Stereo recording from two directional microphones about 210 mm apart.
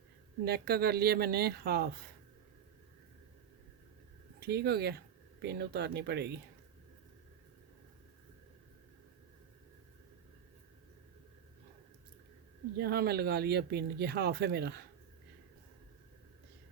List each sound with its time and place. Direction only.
0.4 s speech: 50° right (ahead or behind)
4.4 s speech: 50° right (ahead or behind)
12.7 s speech: 50° right (ahead or behind)